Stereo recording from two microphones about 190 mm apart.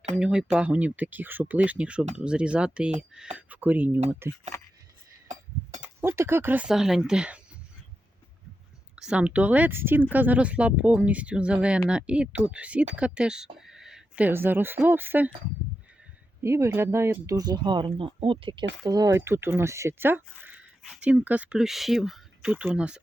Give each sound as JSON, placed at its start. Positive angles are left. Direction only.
{"t": 0.2, "sound": "speech", "side_deg": -5}
{"t": 6.0, "sound": "speech", "side_deg": -15}
{"t": 9.0, "sound": "speech", "side_deg": -5}
{"t": 16.4, "sound": "speech", "side_deg": -15}